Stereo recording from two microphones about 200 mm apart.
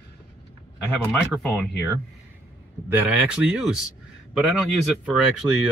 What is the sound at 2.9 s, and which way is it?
Speech, 10° right (ahead or behind).